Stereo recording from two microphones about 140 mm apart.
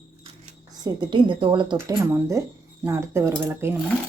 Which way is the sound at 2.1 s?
20° right (ahead or behind).